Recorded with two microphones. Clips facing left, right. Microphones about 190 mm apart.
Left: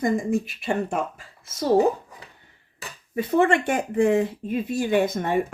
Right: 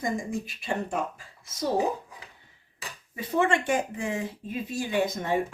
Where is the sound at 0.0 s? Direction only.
60° left (ahead or behind).